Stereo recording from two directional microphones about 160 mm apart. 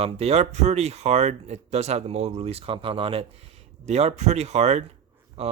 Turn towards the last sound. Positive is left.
turn(degrees=-40)  # may be behind; listen again after turning